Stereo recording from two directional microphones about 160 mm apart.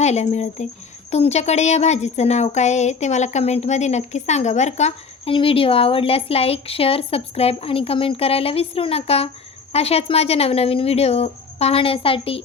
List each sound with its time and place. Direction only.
0.0 s a woman's voice: 45° left (ahead or behind)